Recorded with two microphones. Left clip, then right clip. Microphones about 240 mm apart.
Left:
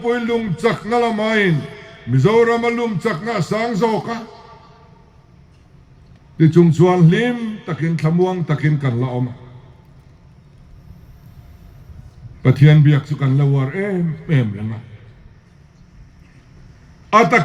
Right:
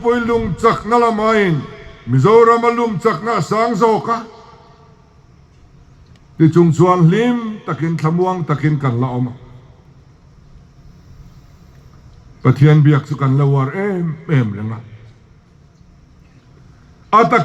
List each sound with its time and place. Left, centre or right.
0.0 s a man's voice: right
6.3 s a man's voice: right
12.4 s a man's voice: right
17.1 s a man's voice: right